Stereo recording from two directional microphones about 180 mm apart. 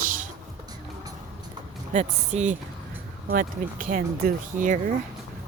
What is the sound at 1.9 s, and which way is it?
Speech, 40° right (ahead or behind).